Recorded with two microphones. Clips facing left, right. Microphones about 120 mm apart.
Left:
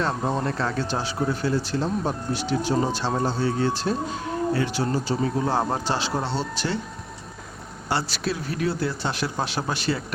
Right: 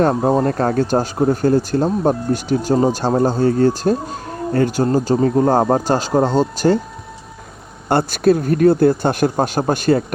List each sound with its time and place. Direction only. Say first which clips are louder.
0.0 s speech: right 10 dB; 40° right (ahead or behind)
7.9 s speech: right 12 dB; 50° right (ahead or behind)